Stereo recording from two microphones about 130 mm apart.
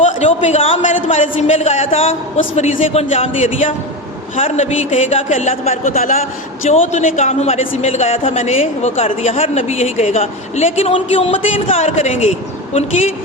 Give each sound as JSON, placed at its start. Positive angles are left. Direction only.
{"t": 0.0, "sound": "a man's voice", "side_deg": 55}
{"t": 1.1, "sound": "a man's voice", "side_deg": 65}